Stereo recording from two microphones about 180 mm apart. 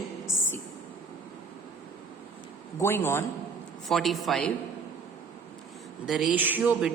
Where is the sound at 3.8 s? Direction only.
Centre (ahead or behind).